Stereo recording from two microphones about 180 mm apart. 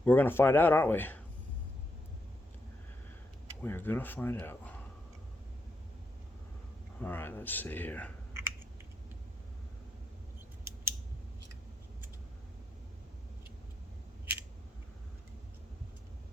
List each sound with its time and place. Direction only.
0.0 s speech: 10° left (ahead or behind)
3.6 s speech: 10° left (ahead or behind)
7.0 s speech: 10° left (ahead or behind)
8.3 s computer keyboard: 15° right (ahead or behind)
10.6 s scissors: 15° right (ahead or behind)